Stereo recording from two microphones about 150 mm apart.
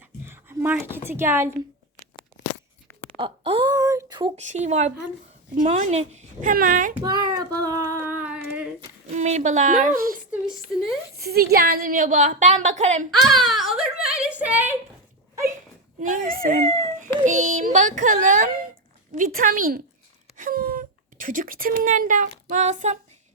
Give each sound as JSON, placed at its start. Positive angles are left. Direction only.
{"t": 0.0, "sound": "a sound", "side_deg": -15}
{"t": 1.0, "sound": "a woman's voice", "side_deg": -15}
{"t": 3.2, "sound": "a sound", "side_deg": -35}
{"t": 3.7, "sound": "speech", "side_deg": -20}
{"t": 4.4, "sound": "a woman's voice", "side_deg": -50}
{"t": 6.5, "sound": "a woman's voice", "side_deg": -65}
{"t": 7.0, "sound": "child singing", "side_deg": -25}
{"t": 9.0, "sound": "a woman's voice", "side_deg": -50}
{"t": 11.2, "sound": "a woman's voice", "side_deg": -90}
{"t": 13.1, "sound": "a sound", "side_deg": 0}
{"t": 16.0, "sound": "a child's voice", "side_deg": -55}
{"t": 17.2, "sound": "a woman's voice", "side_deg": -55}
{"t": 19.1, "sound": "a woman's voice", "side_deg": -65}